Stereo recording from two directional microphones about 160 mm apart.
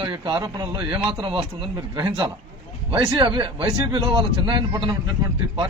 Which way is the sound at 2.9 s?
30° right (ahead or behind).